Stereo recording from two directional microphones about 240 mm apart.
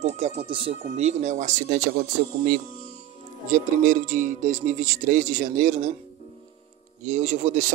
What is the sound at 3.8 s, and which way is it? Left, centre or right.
Speech, right.